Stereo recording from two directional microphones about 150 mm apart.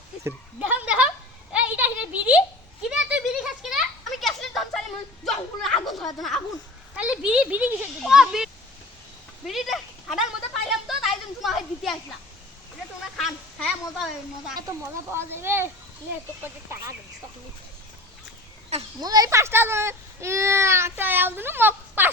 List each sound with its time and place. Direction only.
0.3 s speech: 10° right (ahead or behind)
1.5 s a sound: 10° right (ahead or behind)
6.1 s a child's voice: centre (ahead or behind)
13.1 s speech: centre (ahead or behind)
15.1 s a child's voice: 15° right (ahead or behind)
18.7 s speech: 45° right (ahead or behind)
19.0 s a child's voice: 25° right (ahead or behind)